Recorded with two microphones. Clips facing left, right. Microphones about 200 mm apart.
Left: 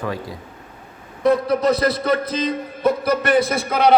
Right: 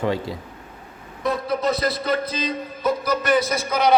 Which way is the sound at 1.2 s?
65° left (ahead or behind).